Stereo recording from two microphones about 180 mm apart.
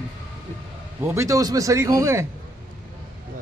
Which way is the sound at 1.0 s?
15° right (ahead or behind).